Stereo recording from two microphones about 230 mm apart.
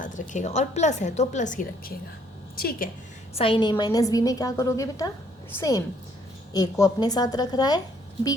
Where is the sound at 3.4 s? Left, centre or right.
Left.